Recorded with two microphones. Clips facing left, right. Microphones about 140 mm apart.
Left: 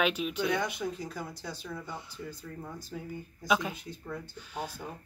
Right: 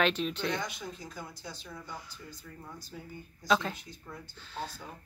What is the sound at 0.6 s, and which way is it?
Speech, 60° left (ahead or behind).